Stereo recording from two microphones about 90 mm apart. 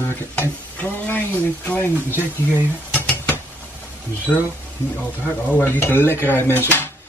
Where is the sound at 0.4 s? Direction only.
20° left (ahead or behind).